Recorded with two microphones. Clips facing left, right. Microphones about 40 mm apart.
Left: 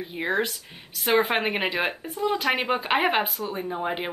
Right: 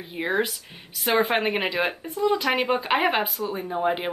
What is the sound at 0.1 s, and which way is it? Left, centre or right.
Speech, centre.